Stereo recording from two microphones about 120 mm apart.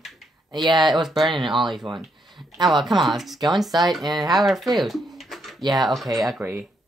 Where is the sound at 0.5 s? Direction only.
40° right (ahead or behind).